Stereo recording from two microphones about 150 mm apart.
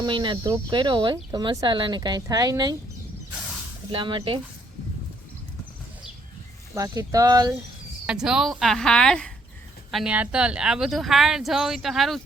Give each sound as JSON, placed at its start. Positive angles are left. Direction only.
{"t": 0.0, "sound": "speech", "side_deg": -30}
{"t": 3.9, "sound": "speech", "side_deg": -35}
{"t": 6.7, "sound": "speech", "side_deg": -20}
{"t": 8.0, "sound": "a woman's voice", "side_deg": -5}
{"t": 9.9, "sound": "a woman's voice", "side_deg": -5}